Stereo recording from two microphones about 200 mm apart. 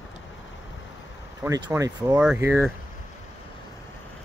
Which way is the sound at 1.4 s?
15° right (ahead or behind).